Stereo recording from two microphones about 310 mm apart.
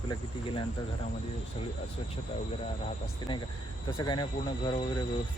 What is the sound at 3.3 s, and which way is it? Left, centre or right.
Speech, centre.